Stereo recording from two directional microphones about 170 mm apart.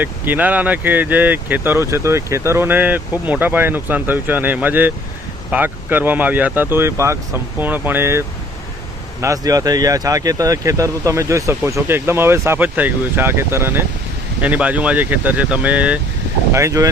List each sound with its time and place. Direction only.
0.0 s speech: 10° right (ahead or behind)
9.2 s speech: 20° right (ahead or behind)